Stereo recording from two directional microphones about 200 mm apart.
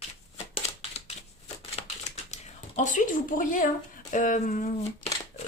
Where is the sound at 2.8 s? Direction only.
40° left (ahead or behind).